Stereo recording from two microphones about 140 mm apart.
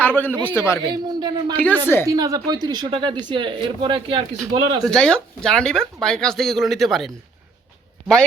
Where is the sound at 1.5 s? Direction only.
10° left (ahead or behind).